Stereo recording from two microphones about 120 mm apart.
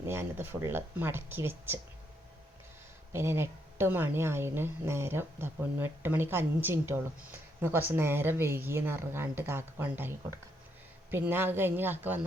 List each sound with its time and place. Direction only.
0.0 s a woman's voice: 20° right (ahead or behind)
3.1 s a woman's voice: 20° right (ahead or behind)